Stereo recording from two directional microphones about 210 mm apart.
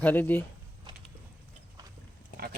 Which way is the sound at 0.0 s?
10° left (ahead or behind).